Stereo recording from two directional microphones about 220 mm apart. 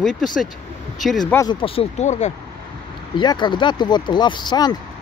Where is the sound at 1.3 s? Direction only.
20° left (ahead or behind).